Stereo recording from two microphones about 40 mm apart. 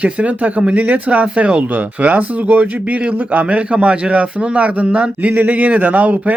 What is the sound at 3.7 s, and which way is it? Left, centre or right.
Speech, right.